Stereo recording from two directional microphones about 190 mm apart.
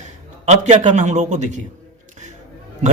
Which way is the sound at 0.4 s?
35° right (ahead or behind).